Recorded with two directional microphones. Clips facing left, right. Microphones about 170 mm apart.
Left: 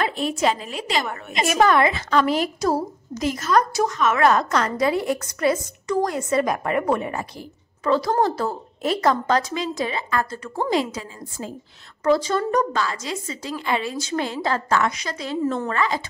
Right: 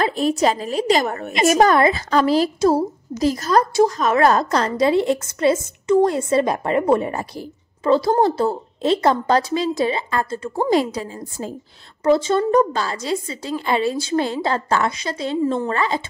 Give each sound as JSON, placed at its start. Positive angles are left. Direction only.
{"t": 0.0, "sound": "a woman's voice", "side_deg": -40}
{"t": 12.0, "sound": "a woman's voice", "side_deg": -25}